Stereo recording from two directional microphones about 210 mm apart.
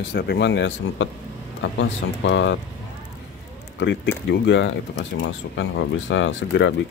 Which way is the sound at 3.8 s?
55° left (ahead or behind).